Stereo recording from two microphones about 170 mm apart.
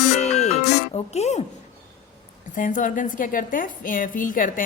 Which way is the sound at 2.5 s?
50° left (ahead or behind).